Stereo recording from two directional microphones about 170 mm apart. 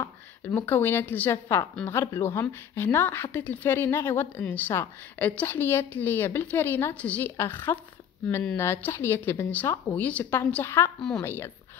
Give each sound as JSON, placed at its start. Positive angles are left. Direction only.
{"t": 0.0, "sound": "a woman's voice", "side_deg": 10}